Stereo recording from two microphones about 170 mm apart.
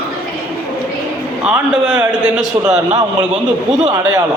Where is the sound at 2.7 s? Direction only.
40° right (ahead or behind).